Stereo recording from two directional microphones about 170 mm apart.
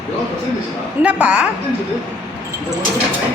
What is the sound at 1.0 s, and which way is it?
Speech, 5° right (ahead or behind).